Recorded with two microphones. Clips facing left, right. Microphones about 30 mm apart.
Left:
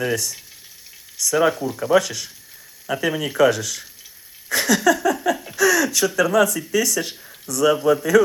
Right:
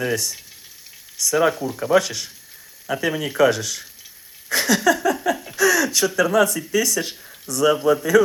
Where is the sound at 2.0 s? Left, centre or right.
Right.